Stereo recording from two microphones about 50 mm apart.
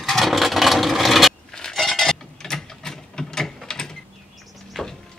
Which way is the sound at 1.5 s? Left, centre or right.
Centre.